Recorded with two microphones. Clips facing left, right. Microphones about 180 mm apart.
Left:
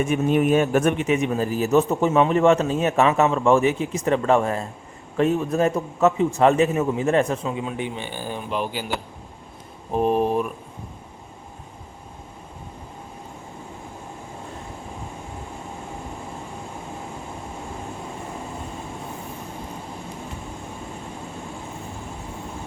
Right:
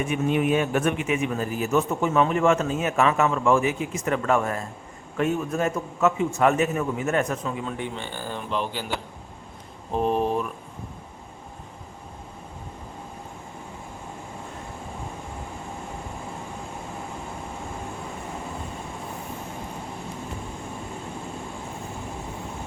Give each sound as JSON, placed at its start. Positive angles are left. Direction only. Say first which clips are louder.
{"t": 0.0, "sound": "a man's voice", "louder": "left 4 dB", "side_deg": 45}
{"t": 7.4, "sound": "speech", "louder": "left 3 dB", "side_deg": 20}
{"t": 9.9, "sound": "speech", "louder": "left 3 dB", "side_deg": 10}